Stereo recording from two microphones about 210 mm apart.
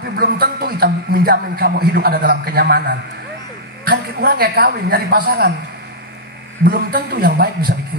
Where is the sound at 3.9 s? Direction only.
45° right (ahead or behind).